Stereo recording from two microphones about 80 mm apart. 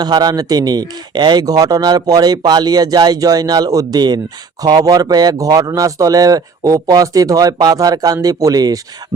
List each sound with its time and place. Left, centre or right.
0.0 s speech: right